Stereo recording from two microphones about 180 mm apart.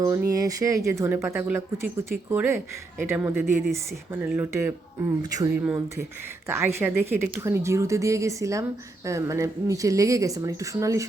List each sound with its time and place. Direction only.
0.0 s speech: 20° right (ahead or behind)
5.5 s speech: 5° right (ahead or behind)
6.7 s speech: 10° right (ahead or behind)